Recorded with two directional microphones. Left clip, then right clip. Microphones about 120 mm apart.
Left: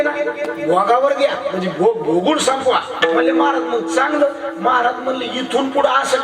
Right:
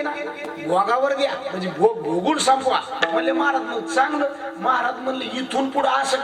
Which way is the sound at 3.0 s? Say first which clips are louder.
Left 6 dB; 40° right (ahead or behind).